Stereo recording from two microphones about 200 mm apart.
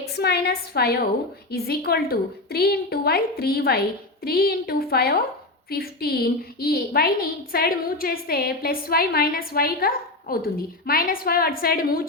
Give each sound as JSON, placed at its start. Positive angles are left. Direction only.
{"t": 0.2, "sound": "a woman's voice", "side_deg": 55}